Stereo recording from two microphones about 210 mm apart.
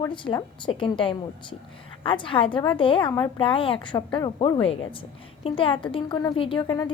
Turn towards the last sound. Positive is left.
turn(degrees=20)  # may be behind; listen again after turning